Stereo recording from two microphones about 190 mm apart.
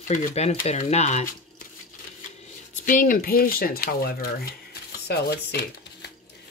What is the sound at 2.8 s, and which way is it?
Speech, 45° left (ahead or behind).